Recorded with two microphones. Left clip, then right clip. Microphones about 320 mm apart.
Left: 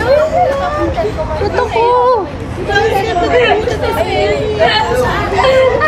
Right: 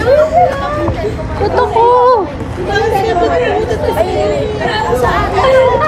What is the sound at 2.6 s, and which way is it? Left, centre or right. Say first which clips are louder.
Chatter: even; right.